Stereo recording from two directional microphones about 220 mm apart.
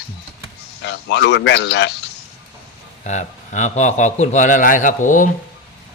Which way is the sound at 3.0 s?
35° left (ahead or behind).